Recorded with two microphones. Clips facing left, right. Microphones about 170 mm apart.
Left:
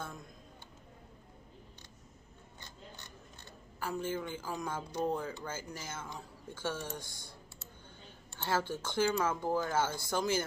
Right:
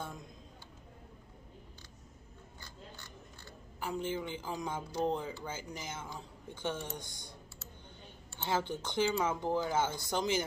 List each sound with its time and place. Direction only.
3.8 s speech: 15° right (ahead or behind)
8.4 s speech: 15° right (ahead or behind)